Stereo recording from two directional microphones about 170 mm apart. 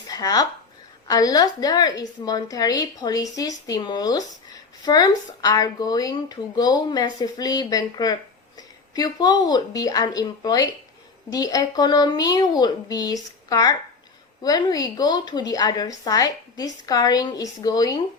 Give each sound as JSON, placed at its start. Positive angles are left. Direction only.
{"t": 0.1, "sound": "a woman's voice", "side_deg": 20}